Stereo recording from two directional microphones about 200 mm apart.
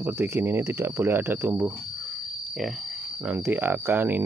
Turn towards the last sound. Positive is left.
turn(degrees=-10)  # may be behind; listen again after turning